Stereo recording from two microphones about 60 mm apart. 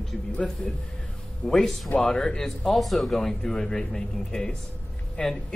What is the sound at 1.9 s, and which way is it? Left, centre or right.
Speech, centre.